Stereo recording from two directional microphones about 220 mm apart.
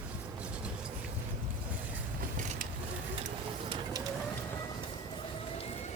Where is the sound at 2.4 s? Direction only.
35° right (ahead or behind).